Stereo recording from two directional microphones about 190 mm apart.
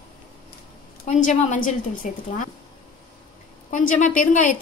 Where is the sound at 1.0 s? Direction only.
45° left (ahead or behind).